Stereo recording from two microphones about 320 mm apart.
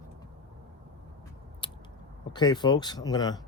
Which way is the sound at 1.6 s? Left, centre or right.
Centre.